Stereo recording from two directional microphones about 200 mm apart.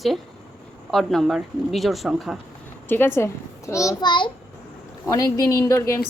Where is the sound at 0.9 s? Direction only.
Centre (ahead or behind).